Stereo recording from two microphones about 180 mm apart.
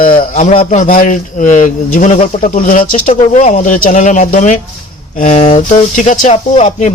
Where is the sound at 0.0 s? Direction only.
50° left (ahead or behind).